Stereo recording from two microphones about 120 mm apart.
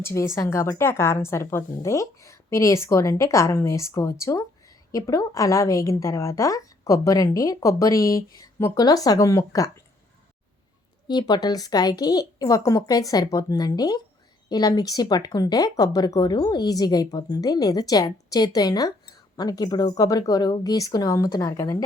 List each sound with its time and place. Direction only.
0.0 s a woman's voice: 25° left (ahead or behind)
11.1 s speech: 35° left (ahead or behind)